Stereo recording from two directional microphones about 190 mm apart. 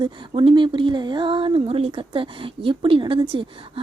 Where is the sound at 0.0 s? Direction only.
25° right (ahead or behind).